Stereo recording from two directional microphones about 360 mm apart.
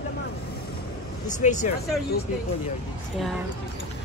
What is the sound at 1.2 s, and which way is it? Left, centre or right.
Speech, centre.